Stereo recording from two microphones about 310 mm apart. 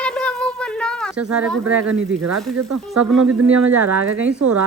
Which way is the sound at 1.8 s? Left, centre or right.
Right.